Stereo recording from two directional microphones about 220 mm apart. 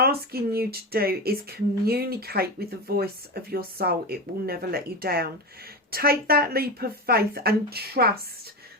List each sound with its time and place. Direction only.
0.0 s speech: 45° right (ahead or behind)